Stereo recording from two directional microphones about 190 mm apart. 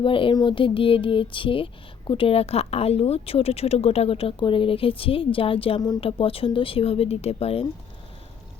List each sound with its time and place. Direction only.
0.0 s speech: 25° left (ahead or behind)